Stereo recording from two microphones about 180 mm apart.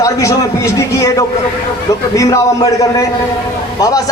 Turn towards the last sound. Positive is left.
turn(degrees=20)  # may be behind; listen again after turning